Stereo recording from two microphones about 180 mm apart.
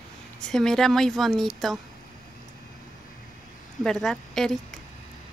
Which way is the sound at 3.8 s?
Centre (ahead or behind).